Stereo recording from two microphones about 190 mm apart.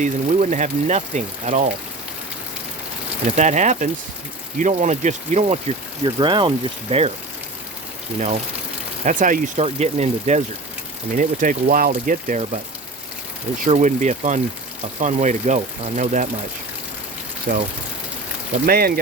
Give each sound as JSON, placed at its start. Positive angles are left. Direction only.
{"t": 0.0, "sound": "speech", "side_deg": -40}
{"t": 3.2, "sound": "speech", "side_deg": -40}
{"t": 6.1, "sound": "speech", "side_deg": -25}
{"t": 9.0, "sound": "speech", "side_deg": -45}
{"t": 13.7, "sound": "speech", "side_deg": -40}
{"t": 17.5, "sound": "speech", "side_deg": -40}
{"t": 18.6, "sound": "speech", "side_deg": -50}